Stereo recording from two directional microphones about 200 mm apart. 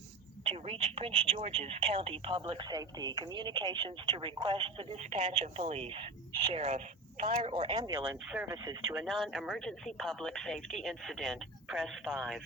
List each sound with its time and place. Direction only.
0.4 s telephone: 30° right (ahead or behind)
1.4 s speech: 30° right (ahead or behind)
7.9 s speech: 10° right (ahead or behind)
9.0 s speech: centre (ahead or behind)